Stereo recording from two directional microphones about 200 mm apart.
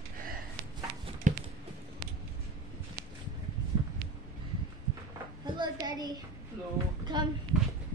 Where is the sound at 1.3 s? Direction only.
40° right (ahead or behind).